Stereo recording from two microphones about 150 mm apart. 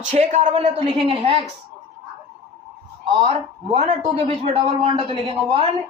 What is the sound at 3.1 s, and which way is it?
Speech, 40° right (ahead or behind).